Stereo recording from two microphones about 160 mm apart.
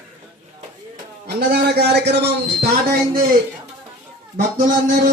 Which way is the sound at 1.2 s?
80° right.